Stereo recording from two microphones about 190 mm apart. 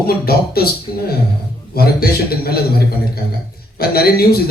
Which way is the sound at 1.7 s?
55° left (ahead or behind).